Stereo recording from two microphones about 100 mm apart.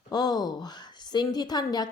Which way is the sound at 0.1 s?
40° left (ahead or behind).